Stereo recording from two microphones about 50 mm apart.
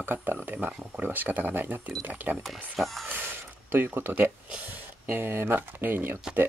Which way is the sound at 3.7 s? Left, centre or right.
Right.